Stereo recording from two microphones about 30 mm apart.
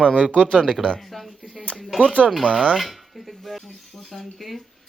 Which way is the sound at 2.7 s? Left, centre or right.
Centre.